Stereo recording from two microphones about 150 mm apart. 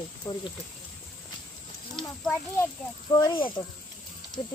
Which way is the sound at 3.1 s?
30° left (ahead or behind).